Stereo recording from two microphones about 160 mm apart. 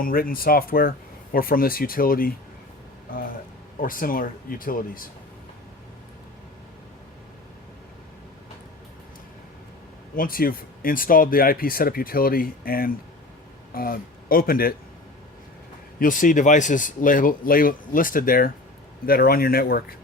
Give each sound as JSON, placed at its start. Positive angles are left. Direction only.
{"t": 0.0, "sound": "speech", "side_deg": 65}
{"t": 3.8, "sound": "speech", "side_deg": 60}
{"t": 10.2, "sound": "speech", "side_deg": 65}
{"t": 16.0, "sound": "speech", "side_deg": 55}